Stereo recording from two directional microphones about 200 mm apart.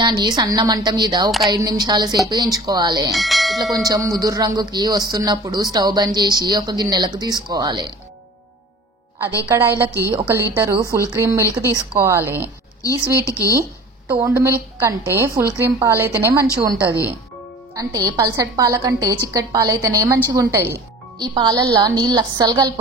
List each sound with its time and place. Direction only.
0.0 s speech: 20° right (ahead or behind)
3.1 s bell: centre (ahead or behind)
3.8 s speech: 20° right (ahead or behind)
9.5 s a woman's voice: 10° right (ahead or behind)
9.8 s speech: 15° left (ahead or behind)
10.1 s a woman's voice: 10° right (ahead or behind)
13.1 s speech: 15° left (ahead or behind)
13.6 s a woman's voice: 10° right (ahead or behind)
17.7 s a woman's voice: 20° right (ahead or behind)